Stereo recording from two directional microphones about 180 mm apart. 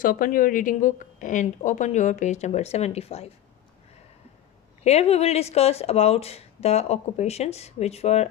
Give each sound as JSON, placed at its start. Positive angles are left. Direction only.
{"t": 0.0, "sound": "speech", "side_deg": 50}
{"t": 4.8, "sound": "speech", "side_deg": 35}